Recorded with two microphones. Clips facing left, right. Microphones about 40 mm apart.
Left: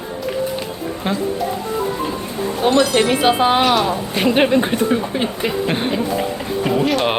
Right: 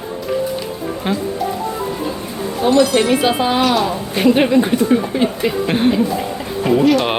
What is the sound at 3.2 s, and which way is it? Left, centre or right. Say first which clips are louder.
Speech: left 1 dB; centre.